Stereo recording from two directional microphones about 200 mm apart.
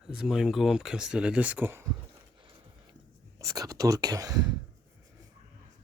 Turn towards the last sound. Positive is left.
turn(degrees=-20)  # may be behind; listen again after turning